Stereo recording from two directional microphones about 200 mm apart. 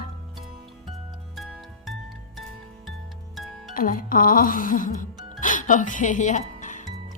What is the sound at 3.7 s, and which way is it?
Music, 45° left (ahead or behind).